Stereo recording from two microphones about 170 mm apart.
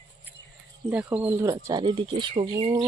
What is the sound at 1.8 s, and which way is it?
Speech, 30° right (ahead or behind).